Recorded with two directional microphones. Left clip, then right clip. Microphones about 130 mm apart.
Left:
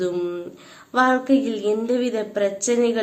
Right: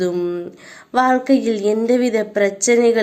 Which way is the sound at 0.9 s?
40° right (ahead or behind).